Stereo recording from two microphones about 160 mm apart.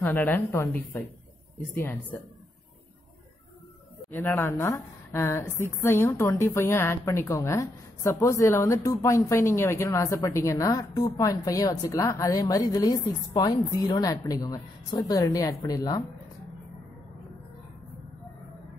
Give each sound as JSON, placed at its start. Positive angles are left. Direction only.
{"t": 0.0, "sound": "a woman's voice", "side_deg": 10}
{"t": 4.1, "sound": "a woman's voice", "side_deg": 10}